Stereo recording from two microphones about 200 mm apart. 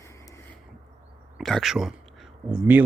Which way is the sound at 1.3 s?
Centre (ahead or behind).